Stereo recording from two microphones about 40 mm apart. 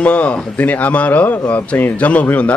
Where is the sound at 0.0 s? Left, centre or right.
Left.